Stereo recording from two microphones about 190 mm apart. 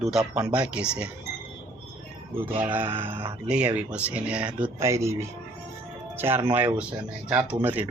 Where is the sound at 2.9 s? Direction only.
25° right (ahead or behind).